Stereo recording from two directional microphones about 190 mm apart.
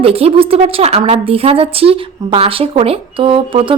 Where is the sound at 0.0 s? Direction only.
30° right (ahead or behind).